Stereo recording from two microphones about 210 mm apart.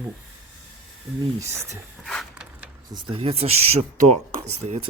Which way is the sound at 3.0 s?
25° right (ahead or behind).